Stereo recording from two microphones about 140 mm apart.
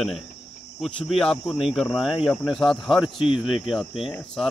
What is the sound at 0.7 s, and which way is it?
Speech, centre (ahead or behind).